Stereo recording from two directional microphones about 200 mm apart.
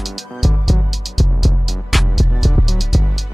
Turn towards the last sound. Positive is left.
turn(degrees=0)  # may be behind; listen again after turning